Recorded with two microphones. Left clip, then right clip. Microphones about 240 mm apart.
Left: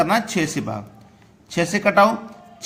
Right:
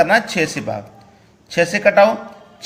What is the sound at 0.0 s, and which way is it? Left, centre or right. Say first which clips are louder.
A man's voice: right 5 dB; left.